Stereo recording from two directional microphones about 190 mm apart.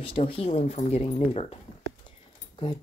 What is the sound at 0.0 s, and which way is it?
Speech, 30° left (ahead or behind).